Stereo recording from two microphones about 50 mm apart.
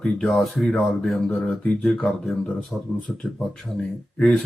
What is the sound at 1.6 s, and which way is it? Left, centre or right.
Speech, centre.